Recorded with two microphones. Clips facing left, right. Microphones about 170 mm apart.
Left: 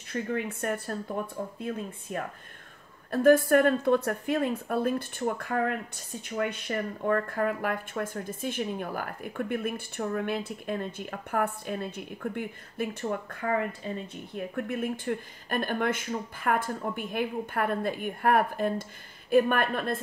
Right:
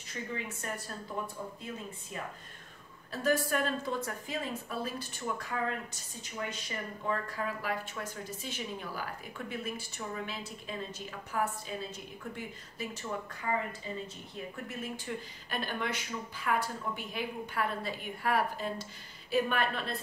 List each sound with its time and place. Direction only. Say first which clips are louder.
0.1 s speech: left 8 dB; 55° left (ahead or behind)